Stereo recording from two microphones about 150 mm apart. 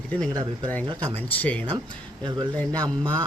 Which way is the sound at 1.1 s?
10° left (ahead or behind).